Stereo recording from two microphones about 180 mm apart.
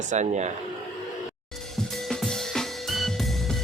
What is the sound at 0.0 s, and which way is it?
Speech, 40° right (ahead or behind).